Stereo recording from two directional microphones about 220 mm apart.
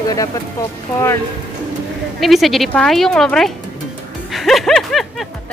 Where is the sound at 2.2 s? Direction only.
Centre (ahead or behind).